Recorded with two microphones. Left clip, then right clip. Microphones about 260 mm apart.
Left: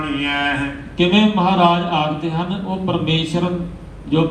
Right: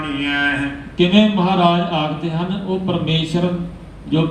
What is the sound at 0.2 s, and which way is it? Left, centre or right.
A man's voice, left.